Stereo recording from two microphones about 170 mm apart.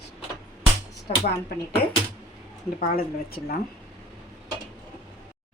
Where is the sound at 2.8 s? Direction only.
60° left (ahead or behind).